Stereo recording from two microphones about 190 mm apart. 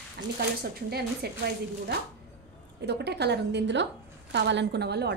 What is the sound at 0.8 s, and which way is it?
A woman's voice, 55° right (ahead or behind).